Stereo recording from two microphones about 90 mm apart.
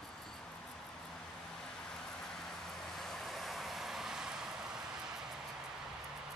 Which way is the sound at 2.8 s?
5° left (ahead or behind).